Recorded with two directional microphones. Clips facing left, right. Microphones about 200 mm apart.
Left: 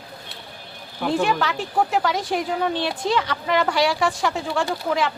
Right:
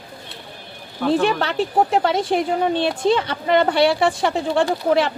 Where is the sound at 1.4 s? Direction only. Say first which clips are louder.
Right 4 dB; 30° right (ahead or behind).